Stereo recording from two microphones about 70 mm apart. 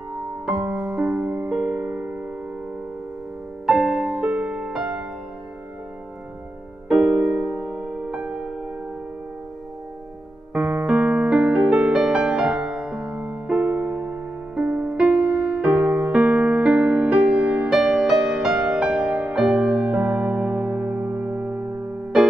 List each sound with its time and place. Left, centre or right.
0.7 s music: centre
3.6 s music: centre
4.1 s music: right
6.9 s music: centre
10.5 s electric piano: right; by 12.4 s centre
12.4 s music: centre
17.6 s music: centre; by 21.9 s right